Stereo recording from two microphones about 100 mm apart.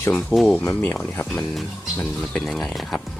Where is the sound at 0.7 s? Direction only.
20° left (ahead or behind).